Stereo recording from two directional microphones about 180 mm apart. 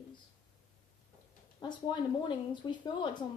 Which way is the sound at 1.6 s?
25° left (ahead or behind).